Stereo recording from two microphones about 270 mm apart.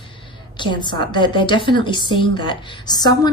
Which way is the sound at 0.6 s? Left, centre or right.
Centre.